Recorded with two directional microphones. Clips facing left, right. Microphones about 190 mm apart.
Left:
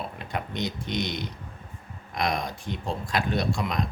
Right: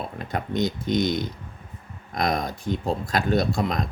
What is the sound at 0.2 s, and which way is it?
Speech, 40° right (ahead or behind).